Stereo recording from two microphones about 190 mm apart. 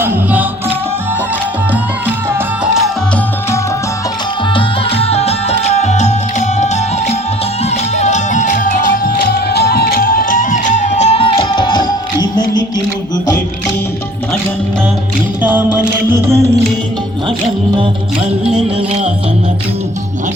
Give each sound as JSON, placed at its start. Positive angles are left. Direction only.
{"t": 0.0, "sound": "music", "side_deg": -10}
{"t": 4.5, "sound": "music", "side_deg": 30}
{"t": 7.6, "sound": "music", "side_deg": 35}
{"t": 15.4, "sound": "music", "side_deg": -10}